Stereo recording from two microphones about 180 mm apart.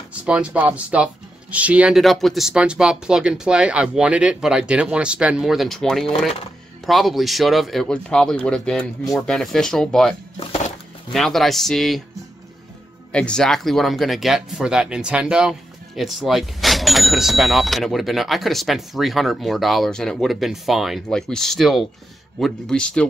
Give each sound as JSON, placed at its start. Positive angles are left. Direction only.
{"t": 0.2, "sound": "speech", "side_deg": -5}
{"t": 10.4, "sound": "a sound", "side_deg": 35}
{"t": 11.1, "sound": "speech", "side_deg": 0}
{"t": 13.1, "sound": "speech", "side_deg": 5}